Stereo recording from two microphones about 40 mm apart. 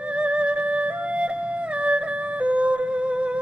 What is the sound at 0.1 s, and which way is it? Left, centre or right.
Music, right.